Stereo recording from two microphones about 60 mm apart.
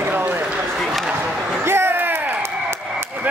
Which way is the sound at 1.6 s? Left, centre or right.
Right.